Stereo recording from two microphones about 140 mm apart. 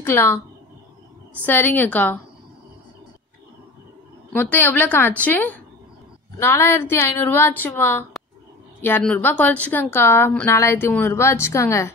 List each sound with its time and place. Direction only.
0.0 s speech: 15° left (ahead or behind)
1.4 s speech: 15° left (ahead or behind)
4.3 s speech: 15° left (ahead or behind)
9.0 s speech: 10° left (ahead or behind)